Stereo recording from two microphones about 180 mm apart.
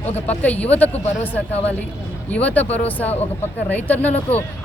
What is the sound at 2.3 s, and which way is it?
Speech, 10° left (ahead or behind).